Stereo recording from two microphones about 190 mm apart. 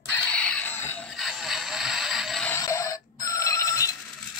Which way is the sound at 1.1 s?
Centre (ahead or behind).